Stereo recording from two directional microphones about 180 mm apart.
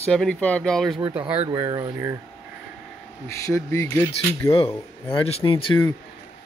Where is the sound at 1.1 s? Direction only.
10° right (ahead or behind).